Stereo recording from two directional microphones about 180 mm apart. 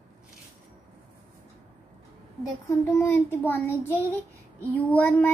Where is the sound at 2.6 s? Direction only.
15° left (ahead or behind).